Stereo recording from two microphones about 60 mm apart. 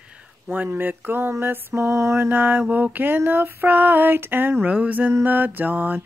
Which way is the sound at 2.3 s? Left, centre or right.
Right.